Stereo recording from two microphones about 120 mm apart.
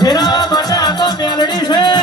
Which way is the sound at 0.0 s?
35° left (ahead or behind).